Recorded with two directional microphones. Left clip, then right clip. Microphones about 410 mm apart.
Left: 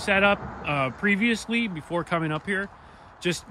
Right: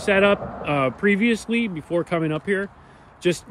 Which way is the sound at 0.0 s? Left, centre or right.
Centre.